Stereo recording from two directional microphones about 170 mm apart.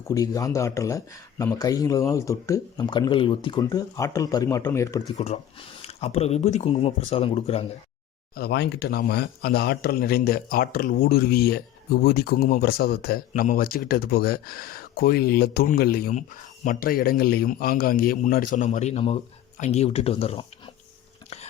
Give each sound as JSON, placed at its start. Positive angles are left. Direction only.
{"t": 0.0, "sound": "speech", "side_deg": 20}
{"t": 5.1, "sound": "speech", "side_deg": 40}
{"t": 8.4, "sound": "speech", "side_deg": 70}